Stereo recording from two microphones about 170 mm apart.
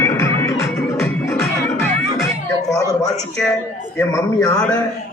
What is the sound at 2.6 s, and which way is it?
A woman's voice, 20° left (ahead or behind).